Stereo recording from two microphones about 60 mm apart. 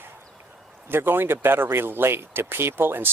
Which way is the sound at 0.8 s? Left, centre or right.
Right.